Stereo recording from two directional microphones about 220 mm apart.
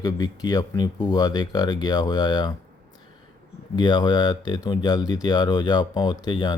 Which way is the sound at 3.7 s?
20° left (ahead or behind).